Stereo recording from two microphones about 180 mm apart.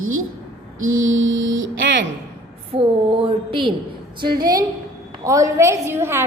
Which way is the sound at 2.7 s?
30° right (ahead or behind).